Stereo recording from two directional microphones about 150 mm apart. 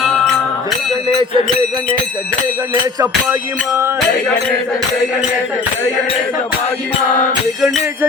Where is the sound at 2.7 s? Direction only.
25° right (ahead or behind).